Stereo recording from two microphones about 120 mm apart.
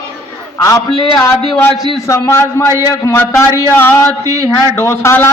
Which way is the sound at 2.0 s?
25° left (ahead or behind).